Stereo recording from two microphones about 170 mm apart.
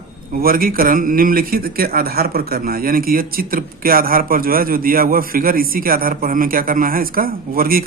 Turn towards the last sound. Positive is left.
turn(degrees=-60)  # may be behind; listen again after turning